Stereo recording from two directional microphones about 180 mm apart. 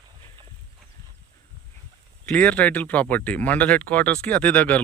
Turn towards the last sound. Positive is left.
turn(degrees=10)  # may be behind; listen again after turning